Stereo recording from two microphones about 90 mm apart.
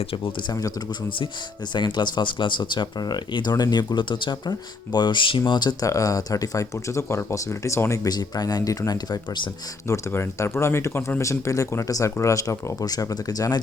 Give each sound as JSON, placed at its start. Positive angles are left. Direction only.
{"t": 0.1, "sound": "speech", "side_deg": 85}
{"t": 1.7, "sound": "speech", "side_deg": 55}
{"t": 5.5, "sound": "speech", "side_deg": 55}
{"t": 5.8, "sound": "speech", "side_deg": 40}
{"t": 8.0, "sound": "speech", "side_deg": 45}
{"t": 9.9, "sound": "speech", "side_deg": 30}